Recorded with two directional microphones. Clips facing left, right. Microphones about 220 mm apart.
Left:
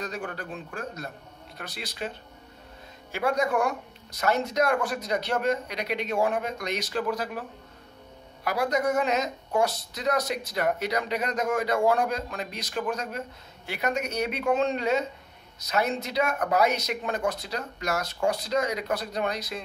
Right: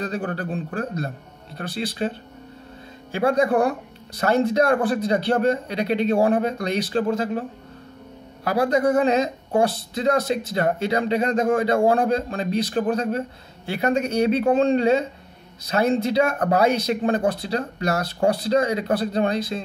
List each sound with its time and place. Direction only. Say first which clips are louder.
0.0 s speech: right 7 dB; 35° right (ahead or behind)
8.5 s speech: right 6 dB; 30° right (ahead or behind)